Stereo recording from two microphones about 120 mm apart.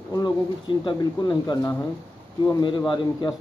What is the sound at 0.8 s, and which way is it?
Speech, 35° left (ahead or behind).